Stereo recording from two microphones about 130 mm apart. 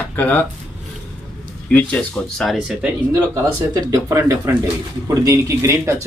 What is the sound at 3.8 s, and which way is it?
Speech, 25° right (ahead or behind).